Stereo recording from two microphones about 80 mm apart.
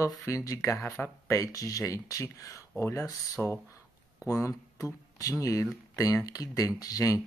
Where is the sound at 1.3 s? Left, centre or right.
Left.